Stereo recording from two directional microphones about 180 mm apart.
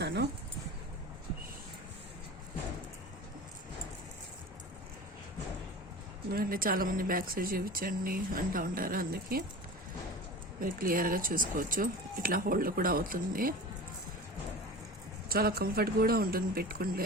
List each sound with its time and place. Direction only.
0.0 s a sound: 70° right (ahead or behind)
6.3 s speech: 55° right (ahead or behind)
10.6 s speech: 50° right (ahead or behind)
15.3 s speech: 55° right (ahead or behind)